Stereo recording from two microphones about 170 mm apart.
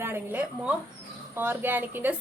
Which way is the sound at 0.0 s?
15° right (ahead or behind).